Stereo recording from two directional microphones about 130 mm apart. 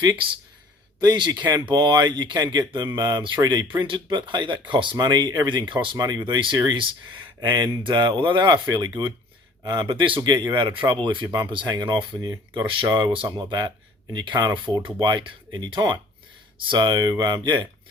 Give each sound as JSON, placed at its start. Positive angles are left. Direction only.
{"t": 0.9, "sound": "speech", "side_deg": -35}
{"t": 10.2, "sound": "speech", "side_deg": -30}